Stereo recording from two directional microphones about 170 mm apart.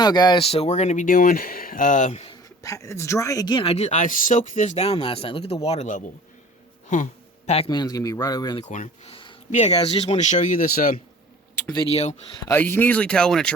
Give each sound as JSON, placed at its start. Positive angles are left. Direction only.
{"t": 0.0, "sound": "speech", "side_deg": 25}
{"t": 2.6, "sound": "speech", "side_deg": 20}
{"t": 8.6, "sound": "speech", "side_deg": 45}
{"t": 11.7, "sound": "speech", "side_deg": 30}
{"t": 12.5, "sound": "speech", "side_deg": 15}